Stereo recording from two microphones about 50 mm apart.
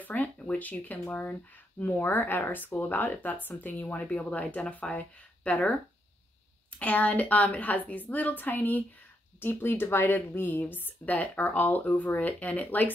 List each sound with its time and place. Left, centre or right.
0.1 s speech: left
6.8 s speech: left